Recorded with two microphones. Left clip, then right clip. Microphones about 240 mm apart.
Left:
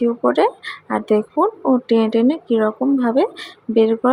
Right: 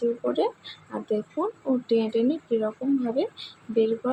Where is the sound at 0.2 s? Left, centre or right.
Left.